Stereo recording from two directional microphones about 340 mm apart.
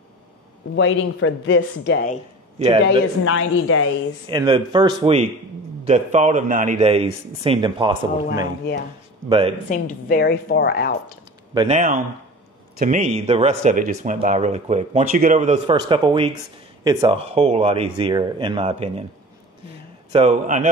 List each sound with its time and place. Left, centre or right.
0.7 s speech: left
2.6 s speech: centre
3.3 s speech: left
4.3 s speech: centre
8.7 s a woman's voice: left
11.5 s speech: centre
20.1 s speech: centre